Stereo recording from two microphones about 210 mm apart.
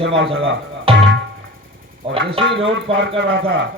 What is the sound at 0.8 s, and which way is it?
Music, 25° right (ahead or behind).